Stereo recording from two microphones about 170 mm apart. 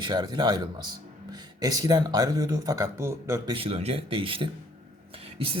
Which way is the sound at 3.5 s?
35° right (ahead or behind).